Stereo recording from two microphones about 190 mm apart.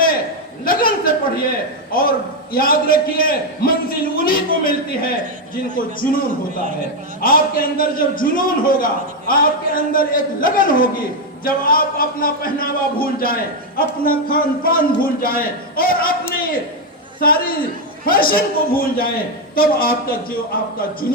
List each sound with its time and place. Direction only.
0.6 s a man's voice: 50° left (ahead or behind)
7.2 s a man's voice: 50° left (ahead or behind)
17.2 s a man's voice: 50° left (ahead or behind)